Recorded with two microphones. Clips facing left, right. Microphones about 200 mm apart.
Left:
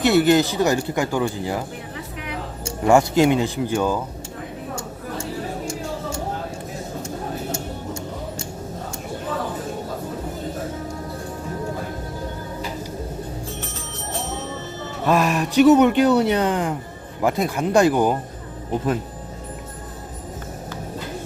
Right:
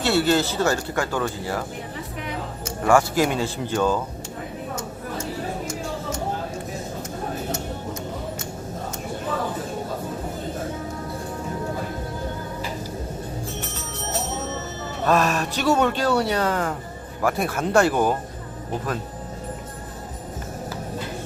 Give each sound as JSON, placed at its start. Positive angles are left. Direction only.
{"t": 0.0, "sound": "speech", "side_deg": 15}
{"t": 2.6, "sound": "speech", "side_deg": 20}
{"t": 15.0, "sound": "speech", "side_deg": 15}